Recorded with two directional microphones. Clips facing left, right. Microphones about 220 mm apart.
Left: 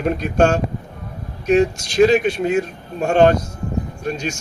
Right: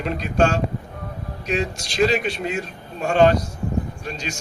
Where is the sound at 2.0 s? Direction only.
45° left (ahead or behind).